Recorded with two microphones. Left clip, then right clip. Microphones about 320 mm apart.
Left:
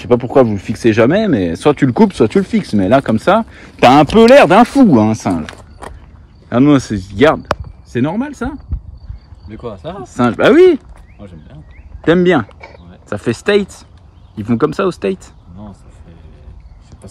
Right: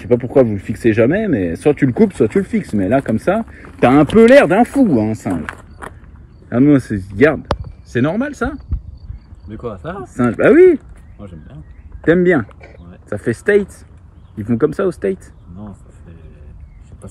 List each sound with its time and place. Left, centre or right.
0.1 s speech: left
0.6 s speech: centre
1.0 s speech: left
1.5 s speech: centre
2.8 s speech: left
3.2 s speech: centre
4.3 s speech: left
6.5 s speech: centre
14.7 s speech: centre